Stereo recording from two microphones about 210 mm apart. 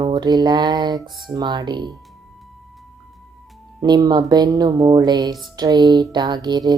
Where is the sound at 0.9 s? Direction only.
Centre (ahead or behind).